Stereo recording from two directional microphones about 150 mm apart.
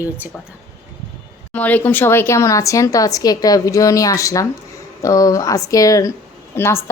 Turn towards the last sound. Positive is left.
turn(degrees=15)  # may be behind; listen again after turning